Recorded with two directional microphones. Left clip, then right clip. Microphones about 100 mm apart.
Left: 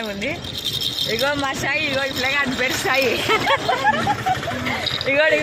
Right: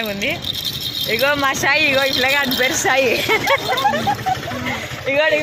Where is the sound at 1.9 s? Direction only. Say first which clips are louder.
Right 5 dB; 50° right (ahead or behind).